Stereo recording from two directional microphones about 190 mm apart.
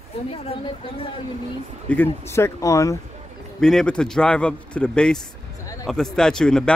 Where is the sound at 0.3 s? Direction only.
30° left (ahead or behind).